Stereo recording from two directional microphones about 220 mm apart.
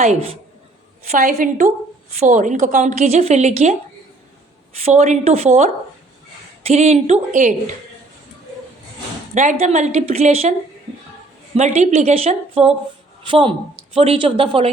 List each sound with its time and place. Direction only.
0.0 s a woman's voice: 25° right (ahead or behind)
4.9 s a woman's voice: 30° right (ahead or behind)
9.3 s a woman's voice: 35° right (ahead or behind)
11.5 s a woman's voice: 30° right (ahead or behind)